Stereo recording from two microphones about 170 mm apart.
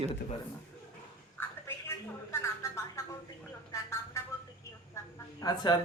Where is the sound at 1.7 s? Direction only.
15° left (ahead or behind).